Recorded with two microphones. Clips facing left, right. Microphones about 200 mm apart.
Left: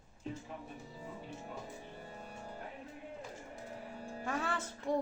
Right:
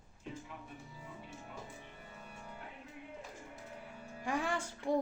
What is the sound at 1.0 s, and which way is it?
Music, 35° left (ahead or behind).